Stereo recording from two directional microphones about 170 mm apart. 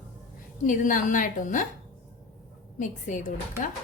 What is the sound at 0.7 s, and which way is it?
Speech, 50° left (ahead or behind).